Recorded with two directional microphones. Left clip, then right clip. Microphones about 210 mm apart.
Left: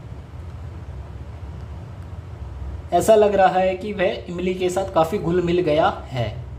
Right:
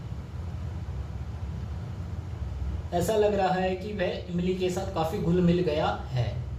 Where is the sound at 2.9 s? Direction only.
50° left (ahead or behind).